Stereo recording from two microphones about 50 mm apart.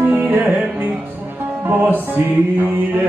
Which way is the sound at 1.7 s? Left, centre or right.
Right.